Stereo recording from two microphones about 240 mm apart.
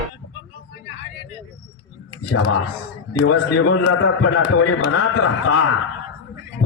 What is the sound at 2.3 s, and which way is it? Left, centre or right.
A man's voice, left.